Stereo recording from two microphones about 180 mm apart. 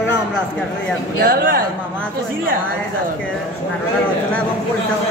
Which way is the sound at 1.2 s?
55° right (ahead or behind).